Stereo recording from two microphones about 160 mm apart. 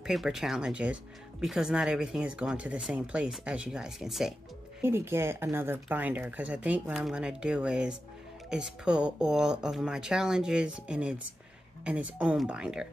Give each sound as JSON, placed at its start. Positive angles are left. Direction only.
{"t": 0.0, "sound": "speech", "side_deg": 0}
{"t": 4.8, "sound": "speech", "side_deg": -15}